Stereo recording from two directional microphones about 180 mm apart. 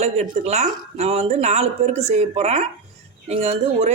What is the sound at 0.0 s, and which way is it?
Speech, 40° right (ahead or behind).